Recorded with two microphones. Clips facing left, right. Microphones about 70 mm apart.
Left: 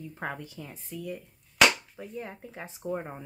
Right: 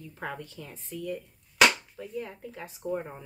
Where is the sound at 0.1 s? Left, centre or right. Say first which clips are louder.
Right 1 dB; centre.